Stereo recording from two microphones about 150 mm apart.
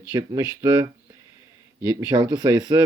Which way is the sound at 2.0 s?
25° right (ahead or behind).